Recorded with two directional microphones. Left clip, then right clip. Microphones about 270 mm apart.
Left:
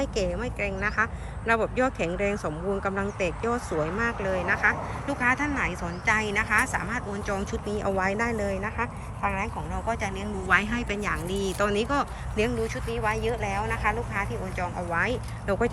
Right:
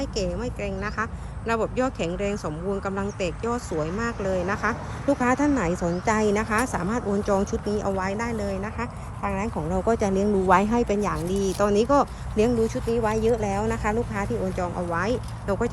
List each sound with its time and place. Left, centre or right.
0.0 s speech: centre
9.8 s speech: centre